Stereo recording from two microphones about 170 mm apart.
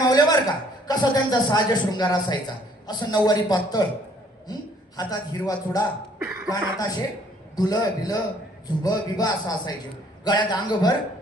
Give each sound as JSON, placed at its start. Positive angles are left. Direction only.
{"t": 0.1, "sound": "a man's voice", "side_deg": 20}
{"t": 5.0, "sound": "a man's voice", "side_deg": 25}
{"t": 6.1, "sound": "cough", "side_deg": -15}
{"t": 6.5, "sound": "a man's voice", "side_deg": 20}